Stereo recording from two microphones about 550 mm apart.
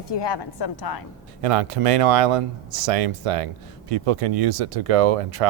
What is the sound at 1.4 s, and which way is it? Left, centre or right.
Speech, right.